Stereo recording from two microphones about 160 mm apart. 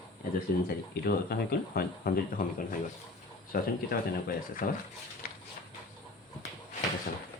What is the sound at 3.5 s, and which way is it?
Speech, 65° left (ahead or behind).